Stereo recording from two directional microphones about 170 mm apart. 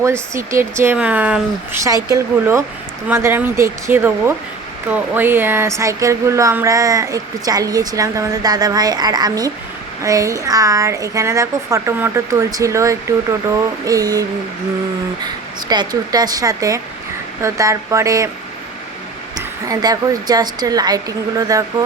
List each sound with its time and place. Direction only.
0.5 s speech: 15° right (ahead or behind)
15.7 s speech: 25° right (ahead or behind)
19.4 s speech: 20° right (ahead or behind)